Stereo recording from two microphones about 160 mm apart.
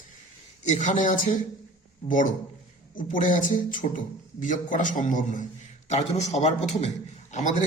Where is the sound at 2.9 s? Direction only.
55° left (ahead or behind).